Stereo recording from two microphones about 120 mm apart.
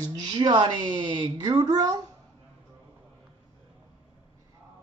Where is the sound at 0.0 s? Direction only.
35° right (ahead or behind).